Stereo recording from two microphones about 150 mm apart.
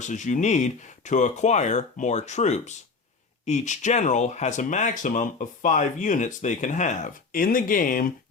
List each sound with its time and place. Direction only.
0.0 s speech: 55° left (ahead or behind)